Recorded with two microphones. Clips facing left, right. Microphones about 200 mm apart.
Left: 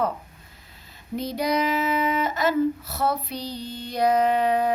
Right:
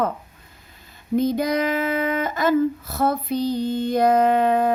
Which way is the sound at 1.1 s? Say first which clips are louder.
Right 5 dB; 50° right (ahead or behind).